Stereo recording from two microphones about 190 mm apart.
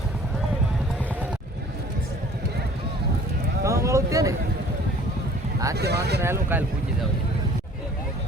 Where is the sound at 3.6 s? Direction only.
15° right (ahead or behind).